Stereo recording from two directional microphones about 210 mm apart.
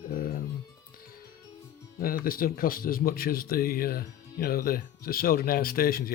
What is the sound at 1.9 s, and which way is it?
Speech, 45° left (ahead or behind).